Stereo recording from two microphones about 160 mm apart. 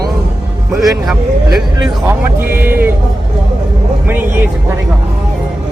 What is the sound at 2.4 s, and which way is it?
Speech, 15° right (ahead or behind).